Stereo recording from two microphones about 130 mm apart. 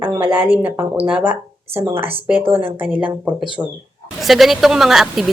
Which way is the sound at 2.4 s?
45° right (ahead or behind).